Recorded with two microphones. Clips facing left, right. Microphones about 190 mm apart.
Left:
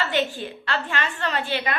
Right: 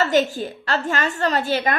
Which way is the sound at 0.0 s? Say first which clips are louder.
Right 6 dB; 40° right (ahead or behind).